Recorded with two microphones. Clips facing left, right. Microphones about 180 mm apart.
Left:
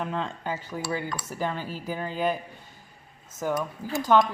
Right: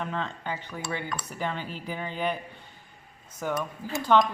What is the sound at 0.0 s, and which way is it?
Speech, 5° left (ahead or behind).